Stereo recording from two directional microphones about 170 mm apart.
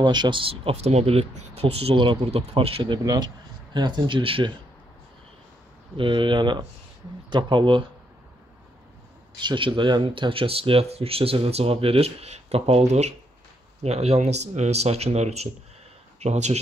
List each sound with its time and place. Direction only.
0.0 s speech: 25° right (ahead or behind)
5.9 s speech: 30° right (ahead or behind)
9.4 s speech: 25° right (ahead or behind)